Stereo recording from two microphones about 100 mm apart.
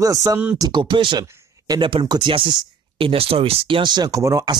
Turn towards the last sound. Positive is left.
turn(degrees=-35)  # may be behind; listen again after turning